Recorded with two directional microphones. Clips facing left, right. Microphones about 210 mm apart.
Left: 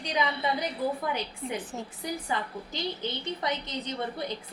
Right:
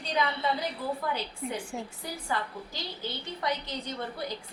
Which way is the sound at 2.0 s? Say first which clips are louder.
Left 4 dB; 20° left (ahead or behind).